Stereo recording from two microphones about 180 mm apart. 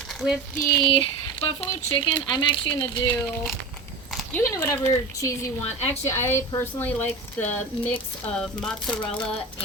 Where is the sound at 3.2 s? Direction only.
5° left (ahead or behind).